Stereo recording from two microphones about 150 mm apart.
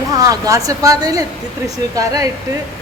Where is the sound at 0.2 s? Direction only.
20° right (ahead or behind).